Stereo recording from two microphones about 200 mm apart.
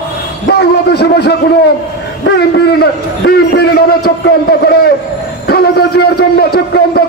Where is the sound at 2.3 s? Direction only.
55° left (ahead or behind).